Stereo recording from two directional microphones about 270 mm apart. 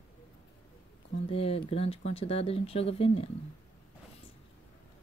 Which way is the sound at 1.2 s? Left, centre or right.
Left.